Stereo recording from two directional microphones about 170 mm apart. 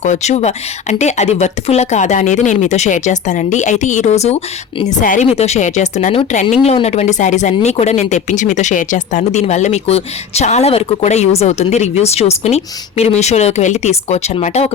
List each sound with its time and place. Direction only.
0.0 s speech: 45° left (ahead or behind)